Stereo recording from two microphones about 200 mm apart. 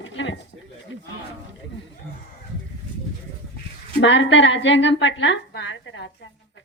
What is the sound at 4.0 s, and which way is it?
A woman's voice, 65° left (ahead or behind).